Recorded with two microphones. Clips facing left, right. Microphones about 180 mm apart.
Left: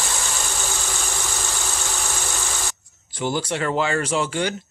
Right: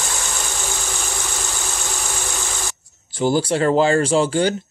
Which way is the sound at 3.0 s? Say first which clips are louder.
Right 6 dB; 30° right (ahead or behind).